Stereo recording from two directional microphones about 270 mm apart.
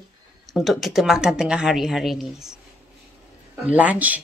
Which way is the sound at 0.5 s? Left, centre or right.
Centre.